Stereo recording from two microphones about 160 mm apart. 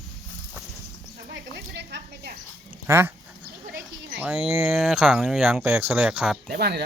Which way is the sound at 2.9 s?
15° right (ahead or behind).